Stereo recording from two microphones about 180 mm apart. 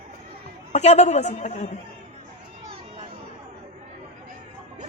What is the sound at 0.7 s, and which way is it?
A man's voice, 40° left (ahead or behind).